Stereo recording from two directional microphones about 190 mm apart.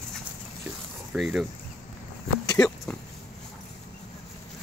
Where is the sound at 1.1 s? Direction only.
Centre (ahead or behind).